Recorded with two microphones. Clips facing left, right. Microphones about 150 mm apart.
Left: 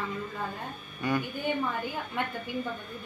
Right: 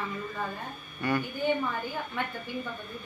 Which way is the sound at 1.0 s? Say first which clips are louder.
Even; 15° left (ahead or behind).